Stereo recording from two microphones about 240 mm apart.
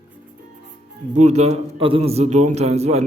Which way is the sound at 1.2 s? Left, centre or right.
Right.